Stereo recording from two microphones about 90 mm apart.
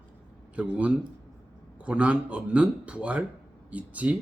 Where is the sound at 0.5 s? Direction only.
15° right (ahead or behind).